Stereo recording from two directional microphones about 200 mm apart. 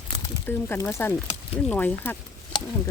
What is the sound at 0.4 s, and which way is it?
Speech, 10° left (ahead or behind).